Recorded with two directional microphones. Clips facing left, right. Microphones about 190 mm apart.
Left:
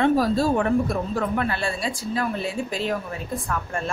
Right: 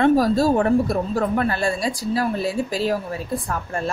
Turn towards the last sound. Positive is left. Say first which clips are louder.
# right 2 dB
turn(degrees=-35)  # may be behind; listen again after turning